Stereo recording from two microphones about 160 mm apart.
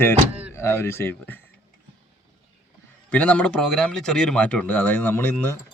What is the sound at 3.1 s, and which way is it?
A man's voice, 10° left (ahead or behind).